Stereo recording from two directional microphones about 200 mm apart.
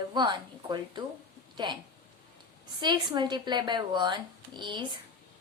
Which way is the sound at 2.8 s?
25° right (ahead or behind).